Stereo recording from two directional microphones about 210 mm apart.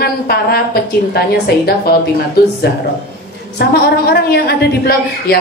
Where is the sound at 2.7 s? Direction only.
50° left (ahead or behind).